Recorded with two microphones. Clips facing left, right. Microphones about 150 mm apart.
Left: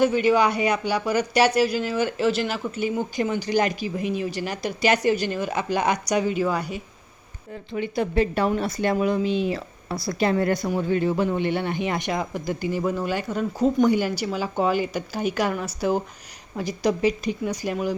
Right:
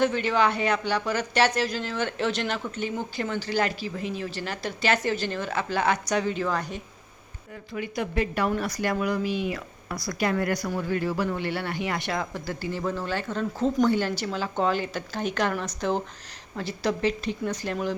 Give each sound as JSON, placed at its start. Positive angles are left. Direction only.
{"t": 0.0, "sound": "speech", "side_deg": 10}
{"t": 7.7, "sound": "a woman's voice", "side_deg": 30}